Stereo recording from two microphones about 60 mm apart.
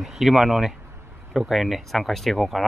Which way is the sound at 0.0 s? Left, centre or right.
Centre.